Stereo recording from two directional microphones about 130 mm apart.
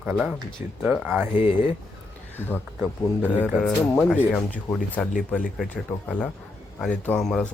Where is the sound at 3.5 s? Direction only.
5° left (ahead or behind).